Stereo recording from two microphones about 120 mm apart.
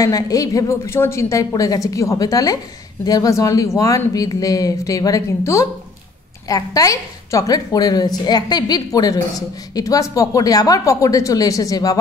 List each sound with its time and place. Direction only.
0.0 s a woman's voice: 30° left (ahead or behind)